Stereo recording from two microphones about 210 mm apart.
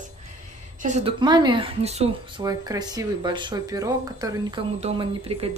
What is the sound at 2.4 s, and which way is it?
Speech, 15° right (ahead or behind).